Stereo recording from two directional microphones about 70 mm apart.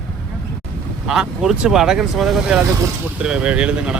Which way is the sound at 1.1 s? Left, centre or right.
Centre.